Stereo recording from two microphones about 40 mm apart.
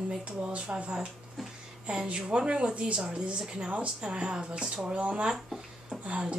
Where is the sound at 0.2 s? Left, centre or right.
Right.